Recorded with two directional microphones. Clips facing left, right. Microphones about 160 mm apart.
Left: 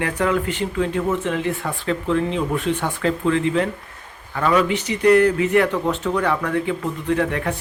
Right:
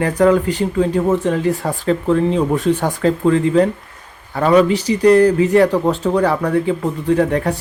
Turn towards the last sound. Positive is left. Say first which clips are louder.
# right 6 dB
turn(degrees=-35)  # may be behind; listen again after turning